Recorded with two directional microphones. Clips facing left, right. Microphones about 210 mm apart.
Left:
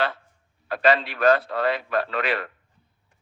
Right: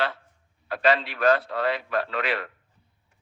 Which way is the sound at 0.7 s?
50° left (ahead or behind).